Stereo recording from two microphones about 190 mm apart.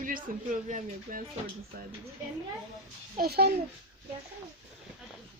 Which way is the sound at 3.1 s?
55° right (ahead or behind).